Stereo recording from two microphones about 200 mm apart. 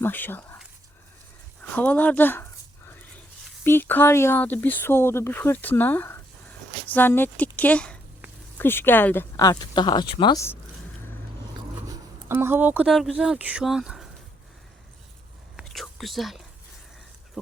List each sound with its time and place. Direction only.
0.0 s speech: 10° left (ahead or behind)
1.7 s a sound: 5° left (ahead or behind)
3.6 s speech: 10° left (ahead or behind)
11.9 s speech: 10° right (ahead or behind)
15.5 s whispering: centre (ahead or behind)